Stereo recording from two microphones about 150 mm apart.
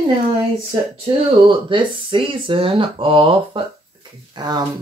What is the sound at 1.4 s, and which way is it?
Speech, 35° right (ahead or behind).